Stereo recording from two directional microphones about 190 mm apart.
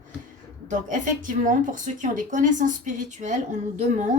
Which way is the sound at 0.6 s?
40° right (ahead or behind).